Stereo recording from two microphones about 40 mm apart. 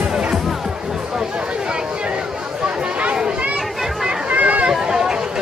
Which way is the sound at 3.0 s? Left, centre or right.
Right.